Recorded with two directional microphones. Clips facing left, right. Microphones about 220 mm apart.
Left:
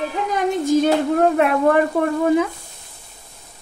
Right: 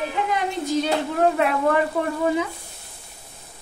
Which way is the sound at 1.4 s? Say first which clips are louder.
Left 4 dB; 55° left (ahead or behind).